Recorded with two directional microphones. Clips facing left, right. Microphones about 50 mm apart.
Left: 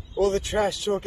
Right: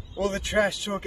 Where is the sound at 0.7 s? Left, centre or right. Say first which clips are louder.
Left 4 dB; centre.